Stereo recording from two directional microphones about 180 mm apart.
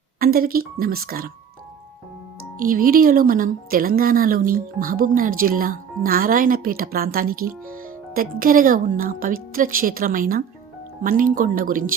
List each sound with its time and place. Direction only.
0.2 s speech: 55° right (ahead or behind)
2.6 s speech: 50° right (ahead or behind)